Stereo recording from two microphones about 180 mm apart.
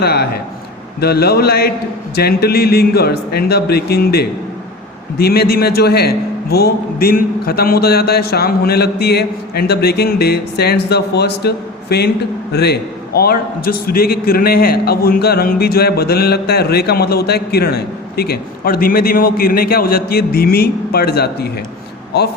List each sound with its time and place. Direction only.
0.0 s a man's voice: 60° left (ahead or behind)